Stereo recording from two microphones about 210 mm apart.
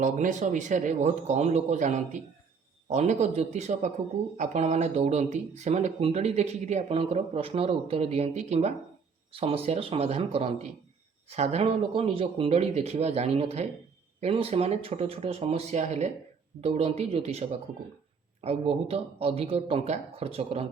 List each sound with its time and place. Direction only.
0.0 s speech: 35° right (ahead or behind)